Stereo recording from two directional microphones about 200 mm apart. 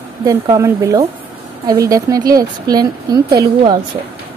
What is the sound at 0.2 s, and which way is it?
A woman's voice, 15° right (ahead or behind).